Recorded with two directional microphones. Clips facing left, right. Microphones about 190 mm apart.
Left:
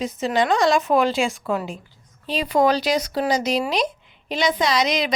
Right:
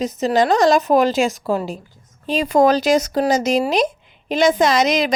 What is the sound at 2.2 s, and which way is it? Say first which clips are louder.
A woman's voice: right 4 dB; 45° right (ahead or behind).